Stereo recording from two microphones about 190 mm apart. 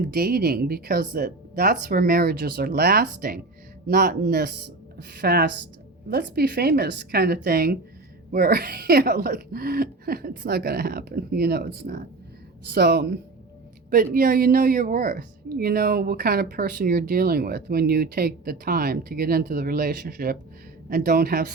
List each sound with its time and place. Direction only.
0.1 s a woman's voice: 50° right (ahead or behind)
13.9 s speech: 50° right (ahead or behind)